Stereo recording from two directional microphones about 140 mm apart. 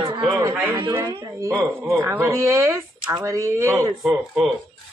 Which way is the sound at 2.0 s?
20° right (ahead or behind).